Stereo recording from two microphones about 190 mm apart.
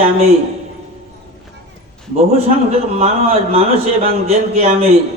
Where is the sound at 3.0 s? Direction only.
30° right (ahead or behind).